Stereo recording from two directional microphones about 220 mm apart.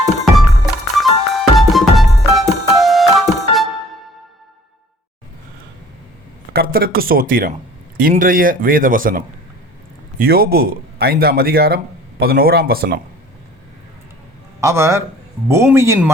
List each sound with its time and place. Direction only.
0.0 s music: centre (ahead or behind)
6.5 s speech: 45° right (ahead or behind)
14.6 s speech: 15° right (ahead or behind)